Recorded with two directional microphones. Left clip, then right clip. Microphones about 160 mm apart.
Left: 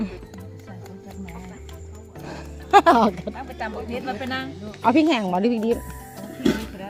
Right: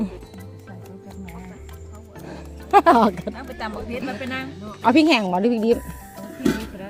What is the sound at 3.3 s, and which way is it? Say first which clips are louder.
Speech: even; 85° right.